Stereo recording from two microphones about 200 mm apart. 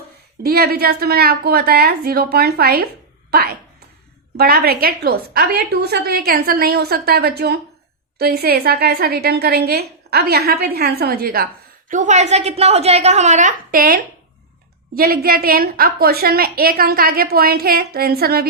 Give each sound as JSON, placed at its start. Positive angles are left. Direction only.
{"t": 0.4, "sound": "a woman's voice", "side_deg": -50}
{"t": 11.9, "sound": "a woman's voice", "side_deg": -35}